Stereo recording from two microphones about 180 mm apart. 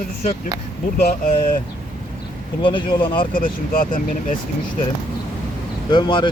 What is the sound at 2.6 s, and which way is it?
Speech, 25° left (ahead or behind).